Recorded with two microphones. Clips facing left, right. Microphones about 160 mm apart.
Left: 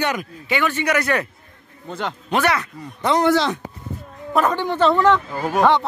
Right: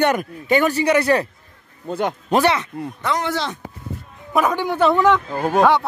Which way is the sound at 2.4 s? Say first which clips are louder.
Even; 25° right (ahead or behind).